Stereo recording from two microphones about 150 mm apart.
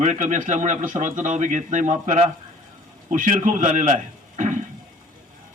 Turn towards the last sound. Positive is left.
turn(degrees=-55)  # may be behind; listen again after turning